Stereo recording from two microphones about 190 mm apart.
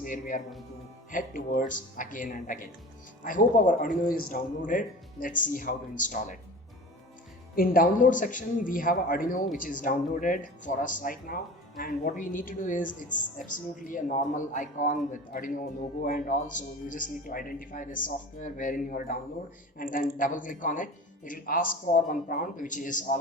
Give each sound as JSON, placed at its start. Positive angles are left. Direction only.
{"t": 0.0, "sound": "speech", "side_deg": 50}
{"t": 7.5, "sound": "speech", "side_deg": 50}